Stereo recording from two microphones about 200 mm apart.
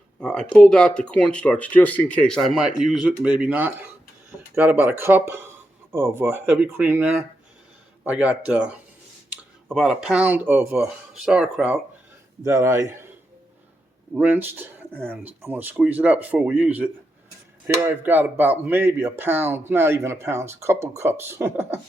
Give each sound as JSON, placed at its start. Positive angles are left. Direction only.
{"t": 0.2, "sound": "speech", "side_deg": 5}
{"t": 12.5, "sound": "speech", "side_deg": -15}
{"t": 14.2, "sound": "speech", "side_deg": -10}